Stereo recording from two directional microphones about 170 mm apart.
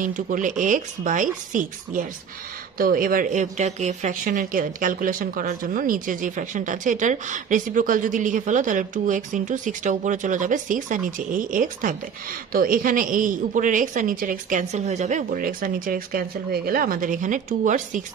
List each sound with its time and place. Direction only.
0.0 s speech: 50° right (ahead or behind)